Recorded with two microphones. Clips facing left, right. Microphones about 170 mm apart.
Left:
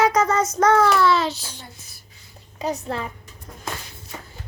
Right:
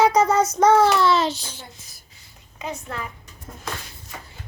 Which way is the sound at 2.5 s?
35° left (ahead or behind).